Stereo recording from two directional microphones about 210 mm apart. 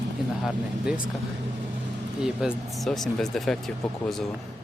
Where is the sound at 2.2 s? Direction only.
5° right (ahead or behind).